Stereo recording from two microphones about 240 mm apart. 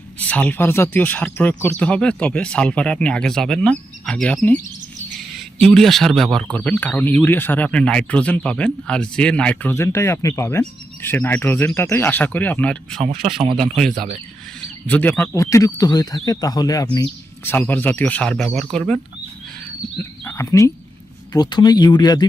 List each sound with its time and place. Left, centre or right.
0.2 s speech: centre
20.2 s speech: centre